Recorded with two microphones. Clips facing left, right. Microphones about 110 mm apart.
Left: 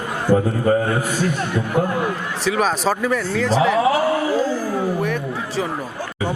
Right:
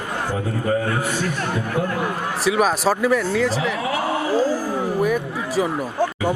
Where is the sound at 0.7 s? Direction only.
40° left (ahead or behind).